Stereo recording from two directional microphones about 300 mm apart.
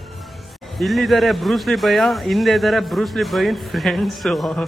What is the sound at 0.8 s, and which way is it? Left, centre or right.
Speech, centre.